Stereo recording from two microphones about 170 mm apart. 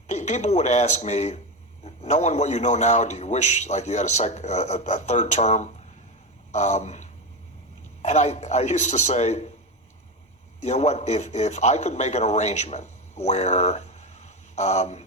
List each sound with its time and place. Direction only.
0.1 s a man's voice: 45° left (ahead or behind)
6.5 s a sound: 40° left (ahead or behind)
8.0 s a man's voice: 40° left (ahead or behind)
10.6 s a man's voice: 40° left (ahead or behind)